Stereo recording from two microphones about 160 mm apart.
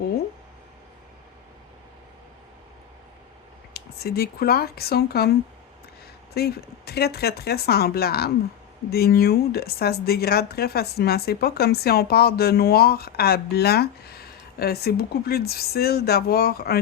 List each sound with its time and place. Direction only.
3.8 s speech: 75° left (ahead or behind)
6.3 s speech: 80° left